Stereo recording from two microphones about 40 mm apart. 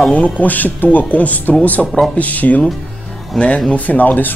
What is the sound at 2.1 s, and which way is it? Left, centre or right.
Speech, left.